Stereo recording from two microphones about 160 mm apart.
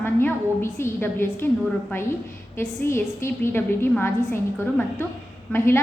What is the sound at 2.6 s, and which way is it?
A woman's voice, 15° left (ahead or behind).